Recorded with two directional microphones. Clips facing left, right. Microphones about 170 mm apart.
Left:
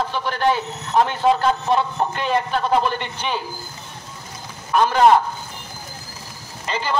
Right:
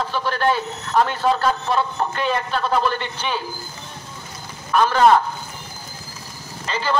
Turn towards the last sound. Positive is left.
turn(degrees=15)  # may be behind; listen again after turning